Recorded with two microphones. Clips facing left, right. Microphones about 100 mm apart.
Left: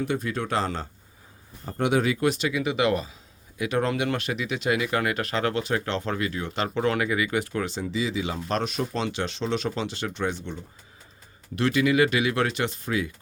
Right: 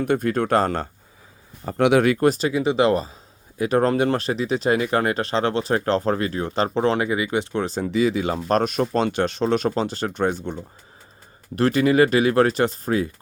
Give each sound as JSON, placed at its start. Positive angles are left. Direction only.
{"t": 0.0, "sound": "speech", "side_deg": -55}
{"t": 1.6, "sound": "speech", "side_deg": -75}
{"t": 2.2, "sound": "speech", "side_deg": -40}
{"t": 7.7, "sound": "speech", "side_deg": -55}